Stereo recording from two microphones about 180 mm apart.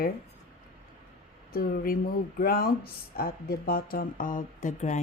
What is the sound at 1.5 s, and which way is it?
Speech, 55° left (ahead or behind).